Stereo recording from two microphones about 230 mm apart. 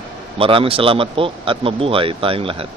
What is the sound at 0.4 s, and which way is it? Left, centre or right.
Speech, right.